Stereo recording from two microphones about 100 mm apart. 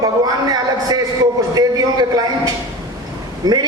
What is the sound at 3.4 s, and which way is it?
Speech, 40° right (ahead or behind).